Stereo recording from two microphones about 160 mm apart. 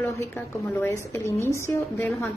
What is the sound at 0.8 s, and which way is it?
A woman's voice, 15° left (ahead or behind).